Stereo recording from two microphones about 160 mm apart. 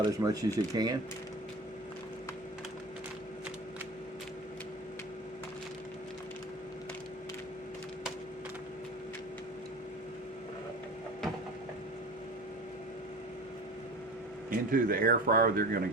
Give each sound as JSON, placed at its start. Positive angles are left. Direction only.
{"t": 0.0, "sound": "speech", "side_deg": -20}
{"t": 14.5, "sound": "speech", "side_deg": -60}